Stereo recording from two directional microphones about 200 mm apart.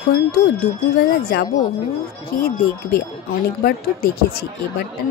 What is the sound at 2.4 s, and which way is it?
Speech, 50° left (ahead or behind).